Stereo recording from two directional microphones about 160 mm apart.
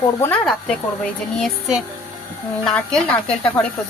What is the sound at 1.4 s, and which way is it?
Speech, centre (ahead or behind).